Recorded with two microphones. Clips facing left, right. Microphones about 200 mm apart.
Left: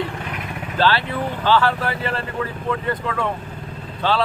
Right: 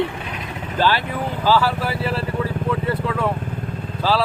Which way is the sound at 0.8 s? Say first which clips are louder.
Left 1 dB; 15° right (ahead or behind).